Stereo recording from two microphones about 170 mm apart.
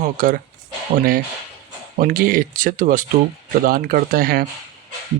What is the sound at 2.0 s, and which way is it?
Speech, 60° right (ahead or behind).